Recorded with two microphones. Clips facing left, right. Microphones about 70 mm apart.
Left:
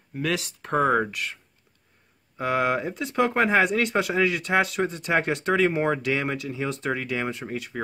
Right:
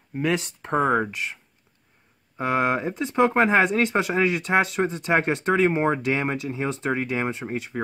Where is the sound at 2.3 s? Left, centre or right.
Right.